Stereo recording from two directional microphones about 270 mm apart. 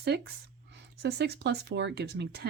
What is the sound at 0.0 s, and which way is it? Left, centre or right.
Speech, right.